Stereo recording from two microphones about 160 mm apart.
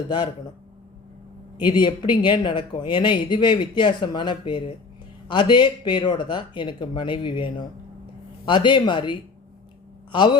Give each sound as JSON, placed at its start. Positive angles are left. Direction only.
{"t": 1.6, "sound": "speech", "side_deg": 30}